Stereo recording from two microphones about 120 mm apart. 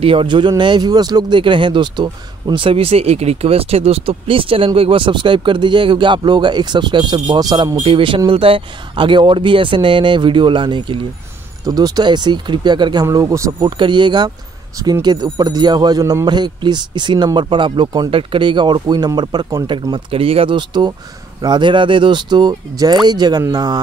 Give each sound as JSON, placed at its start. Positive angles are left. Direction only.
{"t": 0.0, "sound": "a man's voice", "side_deg": -50}